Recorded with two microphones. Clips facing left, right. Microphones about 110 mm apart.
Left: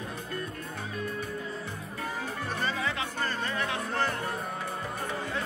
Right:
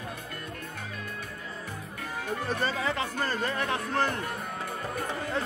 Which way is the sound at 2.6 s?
35° right (ahead or behind).